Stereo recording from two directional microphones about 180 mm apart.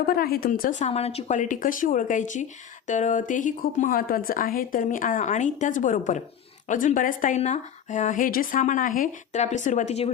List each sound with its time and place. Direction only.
0.0 s speech: 55° left (ahead or behind)
0.9 s a woman's voice: 35° left (ahead or behind)